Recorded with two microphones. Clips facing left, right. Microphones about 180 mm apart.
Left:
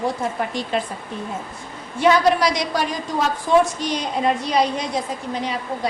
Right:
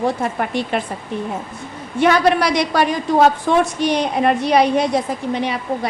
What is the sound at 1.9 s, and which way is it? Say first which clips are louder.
A woman's voice: right 2 dB; 65° right (ahead or behind).